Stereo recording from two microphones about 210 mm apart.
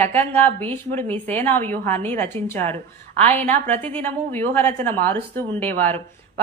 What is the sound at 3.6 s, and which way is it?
A woman's voice, 10° left (ahead or behind).